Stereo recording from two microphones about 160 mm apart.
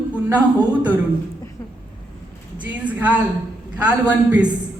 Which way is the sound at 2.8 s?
10° right (ahead or behind).